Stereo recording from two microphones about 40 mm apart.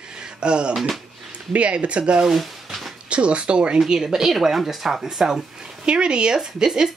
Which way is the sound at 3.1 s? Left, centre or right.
Right.